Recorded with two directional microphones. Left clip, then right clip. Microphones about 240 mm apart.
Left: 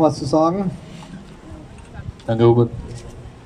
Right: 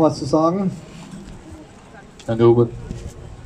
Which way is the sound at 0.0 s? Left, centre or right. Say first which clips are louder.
Left 1 dB; left.